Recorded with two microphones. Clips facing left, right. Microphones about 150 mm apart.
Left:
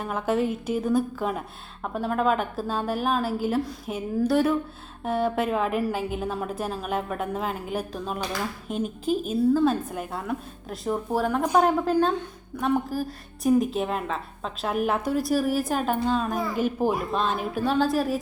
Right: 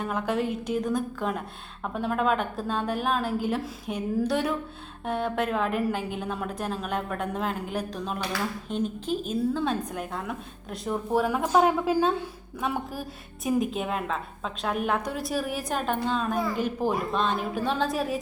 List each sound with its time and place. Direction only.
0.0 s a woman's voice: 5° left (ahead or behind)